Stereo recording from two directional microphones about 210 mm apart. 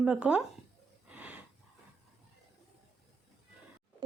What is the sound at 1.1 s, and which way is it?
Snort, 5° right (ahead or behind).